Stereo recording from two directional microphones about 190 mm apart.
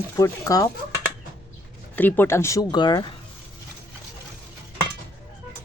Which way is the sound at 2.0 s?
10° left (ahead or behind).